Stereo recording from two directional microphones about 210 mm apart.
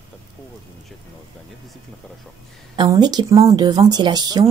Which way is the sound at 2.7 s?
20° right (ahead or behind).